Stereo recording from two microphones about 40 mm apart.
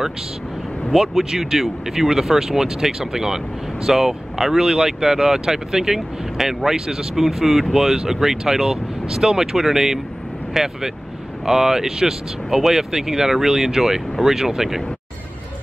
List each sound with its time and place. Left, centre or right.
0.9 s speech: centre